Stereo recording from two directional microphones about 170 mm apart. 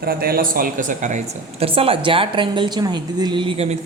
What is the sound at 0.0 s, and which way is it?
Speech, 60° right (ahead or behind).